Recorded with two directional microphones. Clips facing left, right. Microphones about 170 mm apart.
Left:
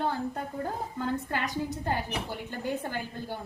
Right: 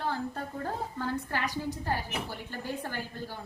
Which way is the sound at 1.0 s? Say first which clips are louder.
Left 4 dB; 20° left (ahead or behind).